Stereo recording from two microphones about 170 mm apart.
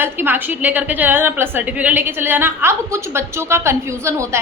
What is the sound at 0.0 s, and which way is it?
A woman's voice, 10° right (ahead or behind).